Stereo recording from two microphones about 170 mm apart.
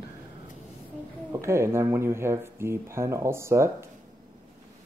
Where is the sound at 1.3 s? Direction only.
15° right (ahead or behind).